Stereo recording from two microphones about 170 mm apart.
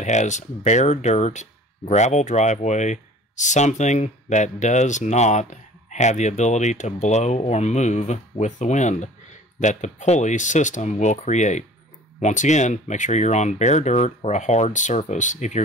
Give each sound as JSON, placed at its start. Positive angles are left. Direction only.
{"t": 0.0, "sound": "speech", "side_deg": 45}